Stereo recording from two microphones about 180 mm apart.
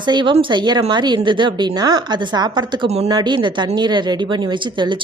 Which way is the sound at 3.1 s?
25° right (ahead or behind).